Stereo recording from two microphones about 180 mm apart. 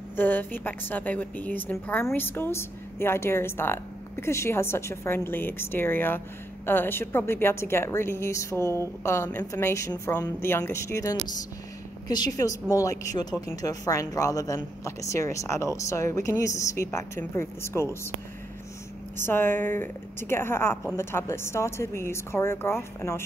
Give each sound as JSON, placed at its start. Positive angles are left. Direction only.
{"t": 0.1, "sound": "a woman's voice", "side_deg": 10}
{"t": 19.1, "sound": "a woman's voice", "side_deg": 10}